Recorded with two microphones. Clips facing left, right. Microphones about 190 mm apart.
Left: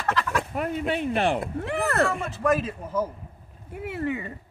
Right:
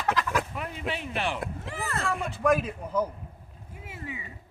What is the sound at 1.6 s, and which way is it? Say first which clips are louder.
Speech: left 10 dB; 65° left (ahead or behind).